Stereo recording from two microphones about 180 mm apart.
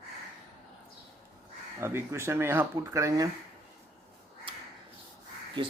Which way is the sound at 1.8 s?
15° right (ahead or behind).